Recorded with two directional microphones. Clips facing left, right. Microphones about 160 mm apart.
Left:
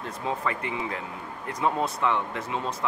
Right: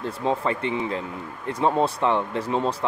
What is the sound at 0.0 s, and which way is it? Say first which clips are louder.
Speech: right 5 dB; 30° right (ahead or behind).